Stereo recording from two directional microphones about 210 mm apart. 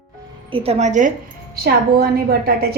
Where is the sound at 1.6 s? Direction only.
50° right (ahead or behind).